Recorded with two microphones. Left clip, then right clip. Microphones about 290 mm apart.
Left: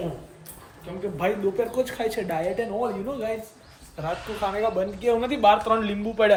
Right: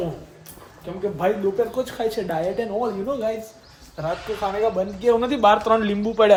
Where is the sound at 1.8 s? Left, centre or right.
Centre.